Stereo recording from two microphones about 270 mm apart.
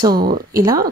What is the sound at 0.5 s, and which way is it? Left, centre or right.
Speech, centre.